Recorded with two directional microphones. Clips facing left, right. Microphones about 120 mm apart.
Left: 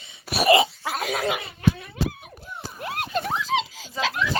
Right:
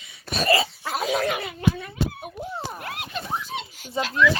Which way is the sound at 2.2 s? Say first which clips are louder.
Right 7 dB; 60° right (ahead or behind).